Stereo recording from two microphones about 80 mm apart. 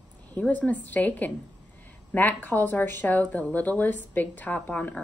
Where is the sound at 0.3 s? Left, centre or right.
Left.